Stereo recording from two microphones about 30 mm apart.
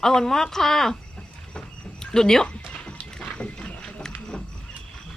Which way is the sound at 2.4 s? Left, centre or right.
Left.